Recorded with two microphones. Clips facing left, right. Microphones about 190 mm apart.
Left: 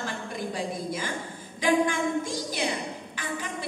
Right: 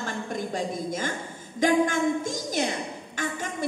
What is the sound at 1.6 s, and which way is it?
Speech, 45° right (ahead or behind).